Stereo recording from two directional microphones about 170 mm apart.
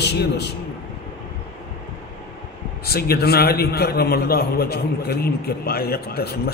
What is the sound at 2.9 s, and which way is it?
A man's voice, 65° left (ahead or behind).